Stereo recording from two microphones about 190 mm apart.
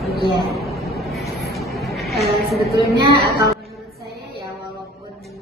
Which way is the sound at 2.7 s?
15° left (ahead or behind).